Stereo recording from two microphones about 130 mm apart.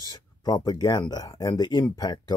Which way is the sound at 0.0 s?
30° left (ahead or behind).